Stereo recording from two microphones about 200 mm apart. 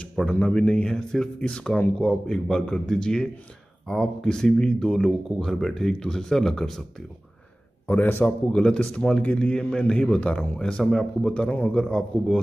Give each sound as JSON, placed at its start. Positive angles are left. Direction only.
{"t": 0.0, "sound": "speech", "side_deg": 5}
{"t": 7.9, "sound": "speech", "side_deg": 10}